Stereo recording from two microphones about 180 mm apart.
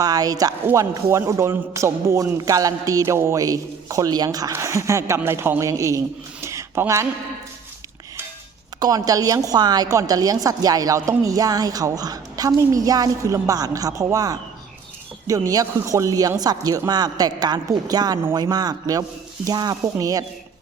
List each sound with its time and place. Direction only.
0.0 s a man's voice: 20° right (ahead or behind)
6.4 s a sound: 15° right (ahead or behind)
8.8 s a woman's voice: 20° right (ahead or behind)